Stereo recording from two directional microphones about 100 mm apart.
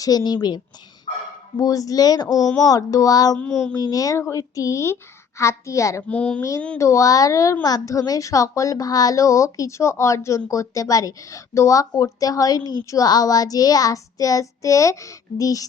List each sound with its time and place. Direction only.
0.0 s a woman's voice: 40° left (ahead or behind)
1.5 s a woman's voice: 35° left (ahead or behind)
3.3 s child singing: 10° left (ahead or behind)
3.8 s a woman's voice: 35° left (ahead or behind)
6.0 s child singing: 15° left (ahead or behind)
6.7 s a woman's voice: 30° left (ahead or behind)